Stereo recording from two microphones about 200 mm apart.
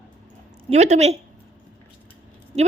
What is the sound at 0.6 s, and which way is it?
Speech, 35° right (ahead or behind).